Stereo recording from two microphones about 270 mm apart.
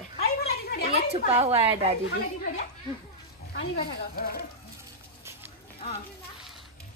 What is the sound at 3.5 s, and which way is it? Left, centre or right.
Speech, left.